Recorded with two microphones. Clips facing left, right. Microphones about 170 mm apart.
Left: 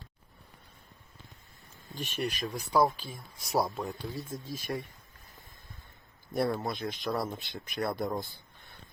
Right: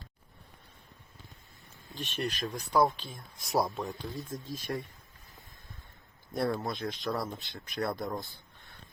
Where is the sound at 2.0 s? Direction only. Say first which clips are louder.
Left 1 dB; 5° left (ahead or behind).